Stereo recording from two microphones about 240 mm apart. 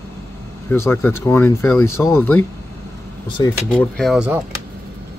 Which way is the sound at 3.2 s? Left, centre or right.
Centre.